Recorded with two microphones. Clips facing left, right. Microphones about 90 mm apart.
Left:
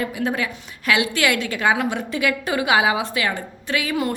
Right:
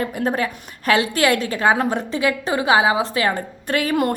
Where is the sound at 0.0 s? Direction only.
40° right (ahead or behind).